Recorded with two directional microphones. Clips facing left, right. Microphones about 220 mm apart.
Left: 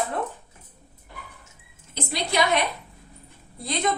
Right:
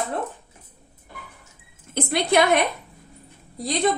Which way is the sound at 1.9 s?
55° right (ahead or behind).